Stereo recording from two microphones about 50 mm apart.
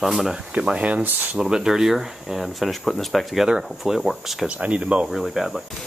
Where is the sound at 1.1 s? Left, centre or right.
Right.